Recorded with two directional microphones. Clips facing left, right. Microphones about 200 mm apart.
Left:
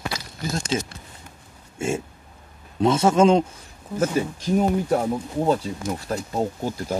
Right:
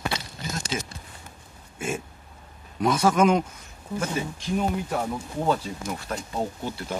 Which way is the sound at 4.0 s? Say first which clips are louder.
Left 7 dB; 40° left (ahead or behind).